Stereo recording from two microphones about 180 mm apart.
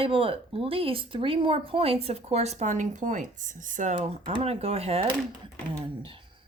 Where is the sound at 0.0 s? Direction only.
30° right (ahead or behind).